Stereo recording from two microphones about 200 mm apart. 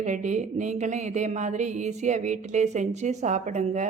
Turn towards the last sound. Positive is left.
turn(degrees=-35)  # may be behind; listen again after turning